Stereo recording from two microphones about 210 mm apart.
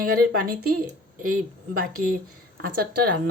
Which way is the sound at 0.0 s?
45° right (ahead or behind).